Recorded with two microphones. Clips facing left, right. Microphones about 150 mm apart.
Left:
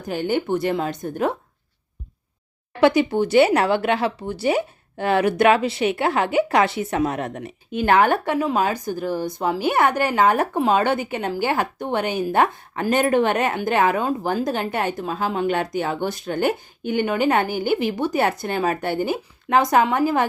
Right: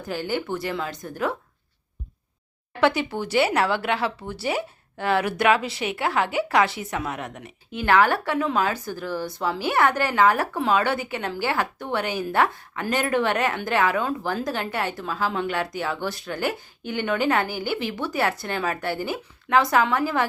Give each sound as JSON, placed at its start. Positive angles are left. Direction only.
{"t": 0.0, "sound": "speech", "side_deg": 20}
{"t": 2.8, "sound": "speech", "side_deg": 15}
{"t": 6.9, "sound": "a woman's voice", "side_deg": 35}
{"t": 7.7, "sound": "speech", "side_deg": 20}
{"t": 13.9, "sound": "a woman's voice", "side_deg": 40}
{"t": 14.2, "sound": "speech", "side_deg": 20}